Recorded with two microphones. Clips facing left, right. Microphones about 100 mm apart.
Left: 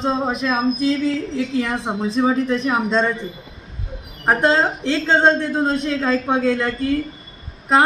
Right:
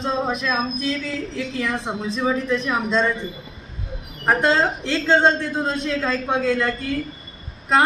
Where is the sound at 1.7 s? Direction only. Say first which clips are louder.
Left 3 dB; 25° left (ahead or behind).